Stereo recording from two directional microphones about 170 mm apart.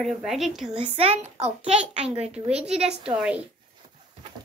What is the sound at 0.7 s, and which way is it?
A woman's voice, 35° right (ahead or behind).